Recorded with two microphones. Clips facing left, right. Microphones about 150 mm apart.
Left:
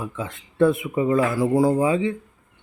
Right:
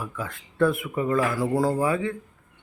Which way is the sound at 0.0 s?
20° left (ahead or behind).